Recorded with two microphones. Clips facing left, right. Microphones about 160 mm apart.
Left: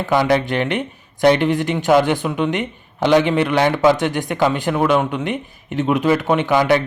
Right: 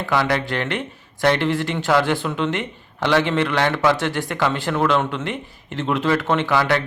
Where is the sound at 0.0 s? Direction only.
20° left (ahead or behind).